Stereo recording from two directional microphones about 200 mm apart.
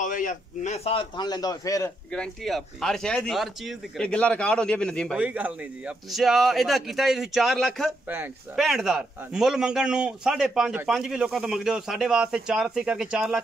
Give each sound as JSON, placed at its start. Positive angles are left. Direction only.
{"t": 0.0, "sound": "a man's voice", "side_deg": 40}
{"t": 2.1, "sound": "speech", "side_deg": 0}